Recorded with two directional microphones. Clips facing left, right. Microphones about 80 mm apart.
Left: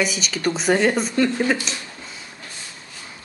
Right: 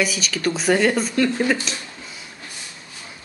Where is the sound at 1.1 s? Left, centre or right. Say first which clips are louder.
Even; centre.